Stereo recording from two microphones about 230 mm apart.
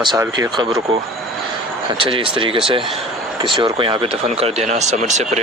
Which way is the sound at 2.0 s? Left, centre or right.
Right.